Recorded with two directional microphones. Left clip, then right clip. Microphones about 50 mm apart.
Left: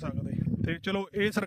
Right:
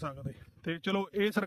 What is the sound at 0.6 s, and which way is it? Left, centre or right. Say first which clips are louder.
Speech: even; left.